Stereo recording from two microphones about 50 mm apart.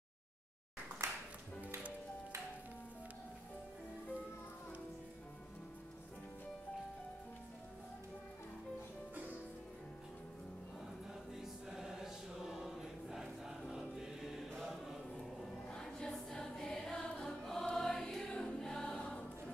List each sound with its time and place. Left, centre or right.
1.0 s music: right
11.3 s choir: centre; by 19.5 s left